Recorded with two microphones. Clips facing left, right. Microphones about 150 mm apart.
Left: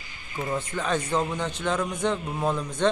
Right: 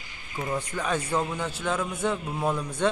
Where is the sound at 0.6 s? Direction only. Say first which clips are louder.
Left 2 dB; 10° right (ahead or behind).